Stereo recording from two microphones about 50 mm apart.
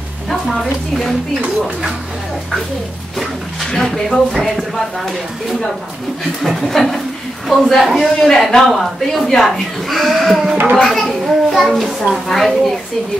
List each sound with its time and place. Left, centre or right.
0.3 s a woman's voice: centre
3.6 s speech: centre